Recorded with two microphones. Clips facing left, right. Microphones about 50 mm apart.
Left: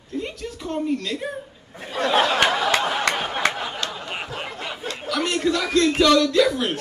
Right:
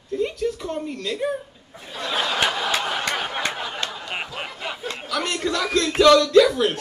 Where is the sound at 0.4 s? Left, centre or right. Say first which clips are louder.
Even; centre.